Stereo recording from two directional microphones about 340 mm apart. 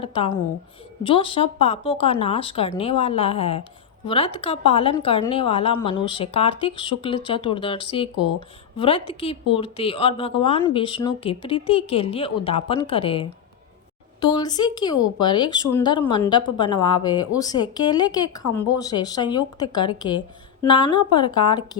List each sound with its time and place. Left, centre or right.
0.0 s speech: centre
14.3 s speech: centre